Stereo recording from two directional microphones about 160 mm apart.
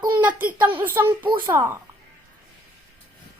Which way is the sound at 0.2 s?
10° right (ahead or behind).